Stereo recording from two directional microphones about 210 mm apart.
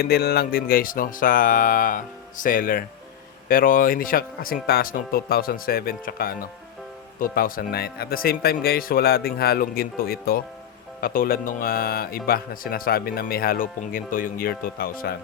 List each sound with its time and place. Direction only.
0.0 s speech: 45° left (ahead or behind)